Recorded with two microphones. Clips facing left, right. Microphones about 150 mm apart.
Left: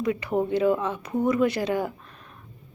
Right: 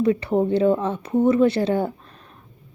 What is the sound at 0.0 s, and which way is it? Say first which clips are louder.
Speech: right 5 dB; 30° right (ahead or behind).